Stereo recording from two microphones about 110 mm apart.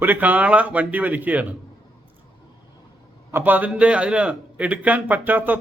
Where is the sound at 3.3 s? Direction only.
15° right (ahead or behind).